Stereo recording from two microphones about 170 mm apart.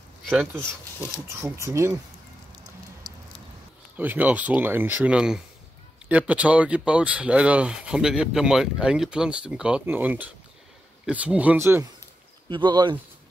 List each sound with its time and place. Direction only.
0.3 s speech: 10° right (ahead or behind)
3.9 s speech: 10° right (ahead or behind)
12.4 s speech: 30° right (ahead or behind)